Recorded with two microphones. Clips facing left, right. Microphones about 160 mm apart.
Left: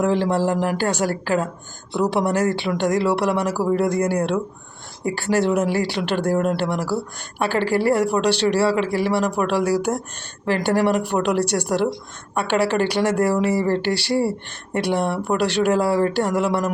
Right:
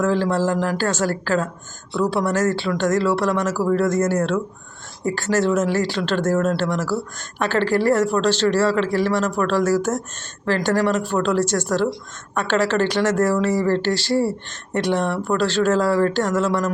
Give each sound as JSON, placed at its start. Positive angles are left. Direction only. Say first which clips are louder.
{"t": 0.0, "sound": "speech", "louder": "even", "side_deg": 15}